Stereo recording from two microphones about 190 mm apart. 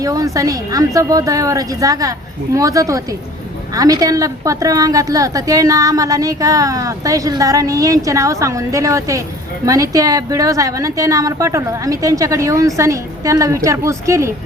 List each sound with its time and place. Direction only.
0.0 s a woman's voice: 20° right (ahead or behind)